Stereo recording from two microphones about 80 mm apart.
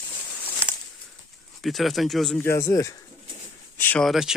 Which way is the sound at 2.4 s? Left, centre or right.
Left.